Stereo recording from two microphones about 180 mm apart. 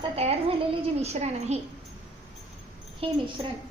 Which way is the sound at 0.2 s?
35° right (ahead or behind).